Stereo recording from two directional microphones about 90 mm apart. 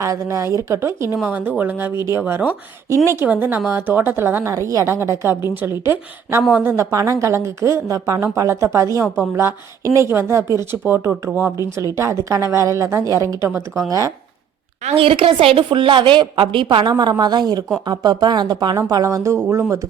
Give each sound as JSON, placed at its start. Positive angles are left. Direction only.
{"t": 0.0, "sound": "speech", "side_deg": -35}
{"t": 1.1, "sound": "speech", "side_deg": -15}
{"t": 2.9, "sound": "speech", "side_deg": -30}
{"t": 6.9, "sound": "speech", "side_deg": -35}
{"t": 14.9, "sound": "a woman's voice", "side_deg": -90}
{"t": 17.0, "sound": "speech", "side_deg": -50}
{"t": 18.8, "sound": "speech", "side_deg": -40}